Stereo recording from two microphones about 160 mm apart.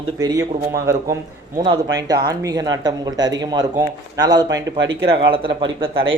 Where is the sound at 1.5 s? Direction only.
30° right (ahead or behind).